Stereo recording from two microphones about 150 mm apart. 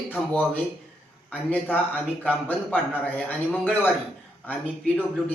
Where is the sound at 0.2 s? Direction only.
Centre (ahead or behind).